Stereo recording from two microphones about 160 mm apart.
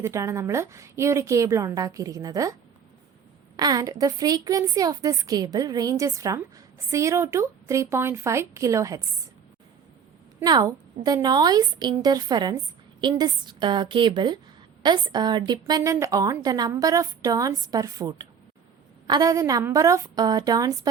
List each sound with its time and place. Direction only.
0.0 s a woman's voice: 20° right (ahead or behind)
3.6 s a woman's voice: 25° right (ahead or behind)
10.4 s a woman's voice: 25° right (ahead or behind)